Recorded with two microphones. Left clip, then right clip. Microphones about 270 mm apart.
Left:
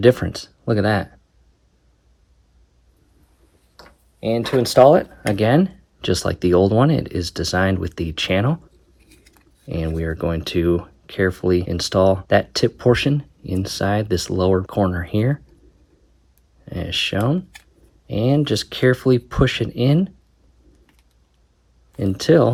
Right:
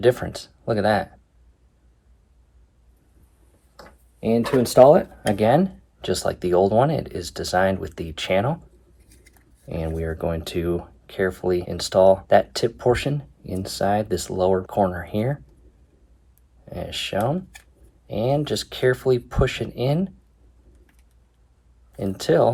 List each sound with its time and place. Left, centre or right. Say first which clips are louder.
0.0 s speech: left 4 dB; left
4.2 s speech: left 1 dB; left
9.6 s speech: left 2 dB; left
16.6 s speech: left 6 dB; left
21.9 s speech: left 4 dB; left